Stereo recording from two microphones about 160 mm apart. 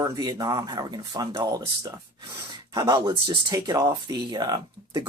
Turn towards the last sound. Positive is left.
turn(degrees=-25)  # may be behind; listen again after turning